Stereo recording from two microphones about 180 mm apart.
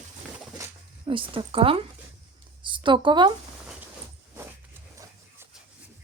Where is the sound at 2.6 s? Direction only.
25° right (ahead or behind).